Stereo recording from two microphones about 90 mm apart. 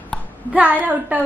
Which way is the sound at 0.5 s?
20° right (ahead or behind).